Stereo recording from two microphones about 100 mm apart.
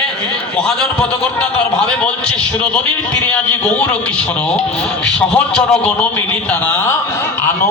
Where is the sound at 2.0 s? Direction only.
10° left (ahead or behind).